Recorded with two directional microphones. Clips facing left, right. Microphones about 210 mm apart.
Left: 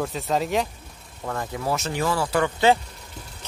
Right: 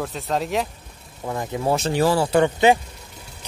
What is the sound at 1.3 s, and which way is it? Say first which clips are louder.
Speech: right 4 dB; 20° right (ahead or behind).